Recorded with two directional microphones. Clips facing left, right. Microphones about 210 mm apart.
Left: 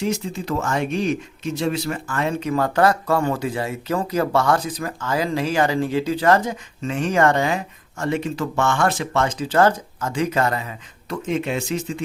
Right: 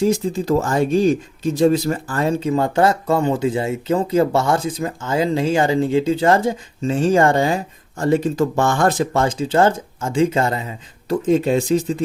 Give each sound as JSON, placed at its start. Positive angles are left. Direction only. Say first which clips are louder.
{"t": 0.0, "sound": "speech", "louder": "right 6 dB", "side_deg": -35}